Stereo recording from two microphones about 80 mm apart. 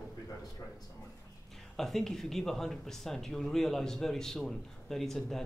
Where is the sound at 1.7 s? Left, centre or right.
Centre.